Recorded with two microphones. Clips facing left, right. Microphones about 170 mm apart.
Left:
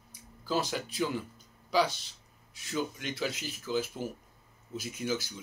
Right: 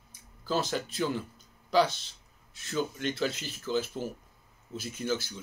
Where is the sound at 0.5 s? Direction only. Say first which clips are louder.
Right 1 dB; 10° left (ahead or behind).